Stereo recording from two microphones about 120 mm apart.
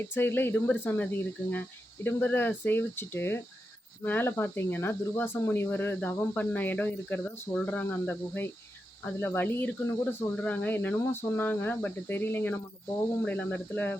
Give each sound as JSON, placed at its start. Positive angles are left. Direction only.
{"t": 0.1, "sound": "speech", "side_deg": 15}